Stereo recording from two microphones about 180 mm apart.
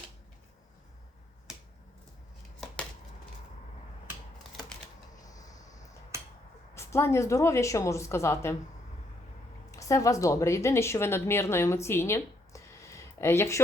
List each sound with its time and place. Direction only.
5.2 s a sound: 20° left (ahead or behind)
6.7 s a woman's voice: 15° left (ahead or behind)
9.7 s a woman's voice: 15° left (ahead or behind)